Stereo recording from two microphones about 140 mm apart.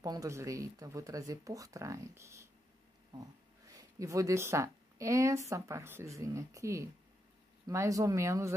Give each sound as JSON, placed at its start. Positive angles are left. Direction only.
{"t": 0.0, "sound": "speech", "side_deg": -25}